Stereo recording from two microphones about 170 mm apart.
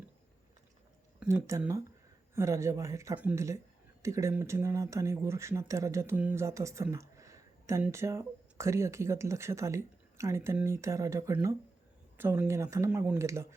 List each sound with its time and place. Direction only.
1.2 s speech: 5° right (ahead or behind)
1.5 s speech: 15° right (ahead or behind)